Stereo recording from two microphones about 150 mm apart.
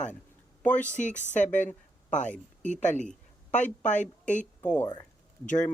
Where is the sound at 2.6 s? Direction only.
55° left (ahead or behind).